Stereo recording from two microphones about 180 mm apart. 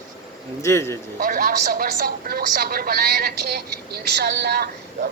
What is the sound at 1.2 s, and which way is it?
A woman's voice, 50° right (ahead or behind).